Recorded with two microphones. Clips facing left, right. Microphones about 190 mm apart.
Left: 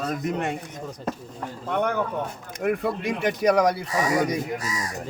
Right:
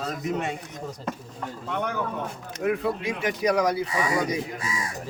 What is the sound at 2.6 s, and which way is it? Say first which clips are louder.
A man's voice: left 1 dB; 55° left (ahead or behind).